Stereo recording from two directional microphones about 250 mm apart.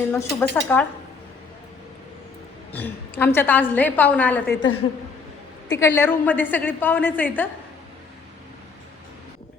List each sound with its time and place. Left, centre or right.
0.1 s a woman's voice: centre
2.7 s a woman's voice: centre
4.4 s a woman's voice: left
5.8 s a woman's voice: centre